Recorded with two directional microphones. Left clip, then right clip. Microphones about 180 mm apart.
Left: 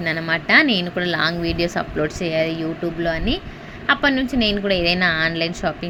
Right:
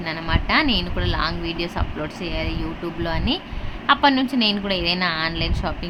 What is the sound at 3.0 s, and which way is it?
A woman's voice, 15° left (ahead or behind).